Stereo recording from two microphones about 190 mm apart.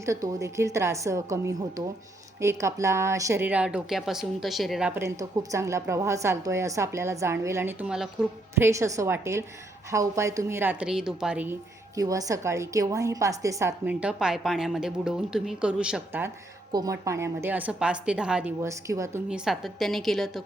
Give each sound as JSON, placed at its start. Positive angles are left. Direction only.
{"t": 0.0, "sound": "speech", "side_deg": -15}
{"t": 11.9, "sound": "speech", "side_deg": -20}
{"t": 16.7, "sound": "speech", "side_deg": -20}
{"t": 19.3, "sound": "a woman's voice", "side_deg": 0}